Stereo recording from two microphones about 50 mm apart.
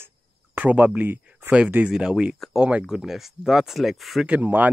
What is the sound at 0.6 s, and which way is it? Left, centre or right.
Speech, right.